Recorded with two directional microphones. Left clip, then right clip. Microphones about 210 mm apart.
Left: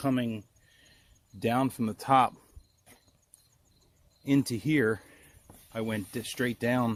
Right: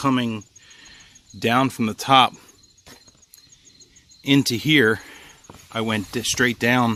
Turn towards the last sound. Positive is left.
turn(degrees=-15)  # may be behind; listen again after turning